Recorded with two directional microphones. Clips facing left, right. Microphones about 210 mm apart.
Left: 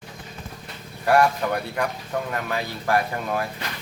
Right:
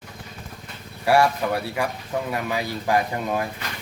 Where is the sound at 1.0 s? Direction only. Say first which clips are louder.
Even; 5° right (ahead or behind).